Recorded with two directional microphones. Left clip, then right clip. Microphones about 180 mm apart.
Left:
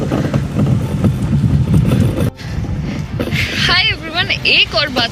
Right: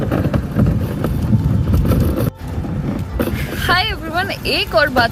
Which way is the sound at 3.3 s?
20° right (ahead or behind).